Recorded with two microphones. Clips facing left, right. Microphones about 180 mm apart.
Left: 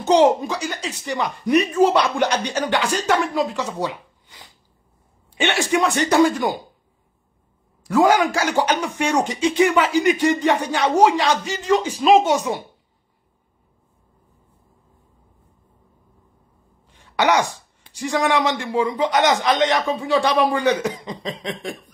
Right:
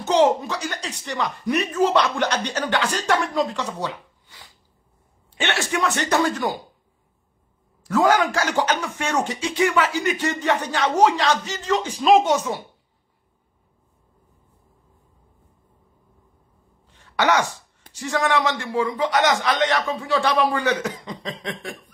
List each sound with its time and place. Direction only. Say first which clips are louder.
0.0 s speech: left 3 dB; 15° left (ahead or behind)
5.4 s speech: left 4 dB; 15° left (ahead or behind)
7.8 s speech: left 2 dB; 10° left (ahead or behind)
17.2 s speech: left 2 dB; 15° left (ahead or behind)